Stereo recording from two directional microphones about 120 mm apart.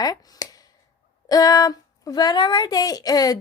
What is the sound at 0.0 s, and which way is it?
A woman's voice, 30° left (ahead or behind).